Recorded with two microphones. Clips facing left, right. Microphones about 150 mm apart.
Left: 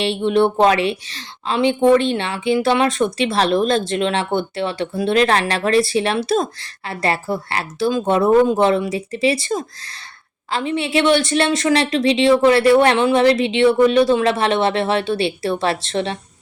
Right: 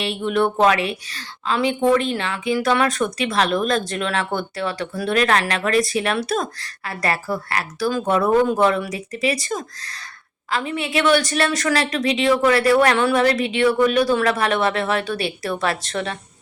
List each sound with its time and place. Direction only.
0.0 s a woman's voice: 30° left (ahead or behind)